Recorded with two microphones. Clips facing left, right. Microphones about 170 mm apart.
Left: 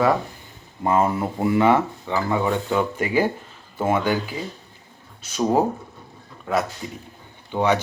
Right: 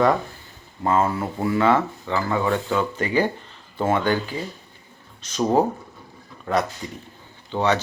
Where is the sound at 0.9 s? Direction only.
15° left (ahead or behind).